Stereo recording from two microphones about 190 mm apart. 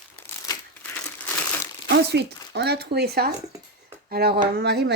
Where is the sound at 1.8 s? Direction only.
60° right (ahead or behind).